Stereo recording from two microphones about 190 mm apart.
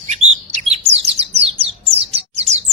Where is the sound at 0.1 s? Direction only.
35° right (ahead or behind).